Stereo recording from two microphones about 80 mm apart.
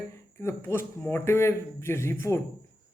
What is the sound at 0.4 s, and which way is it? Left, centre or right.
A woman's voice, left.